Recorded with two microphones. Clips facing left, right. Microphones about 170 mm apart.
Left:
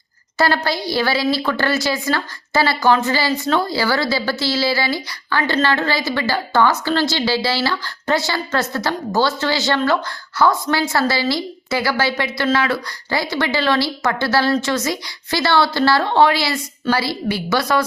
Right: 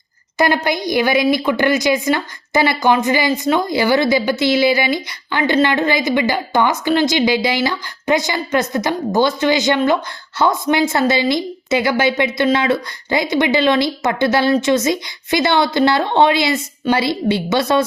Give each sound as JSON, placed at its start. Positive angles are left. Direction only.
{"t": 0.3, "sound": "a woman's voice", "side_deg": -15}